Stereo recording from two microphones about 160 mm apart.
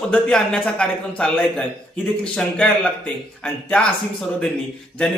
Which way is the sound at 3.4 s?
10° left (ahead or behind).